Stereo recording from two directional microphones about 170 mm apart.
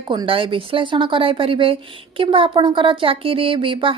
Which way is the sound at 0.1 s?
30° right (ahead or behind).